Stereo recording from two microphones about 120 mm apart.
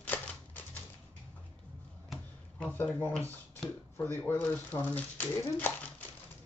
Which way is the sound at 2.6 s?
15° left (ahead or behind).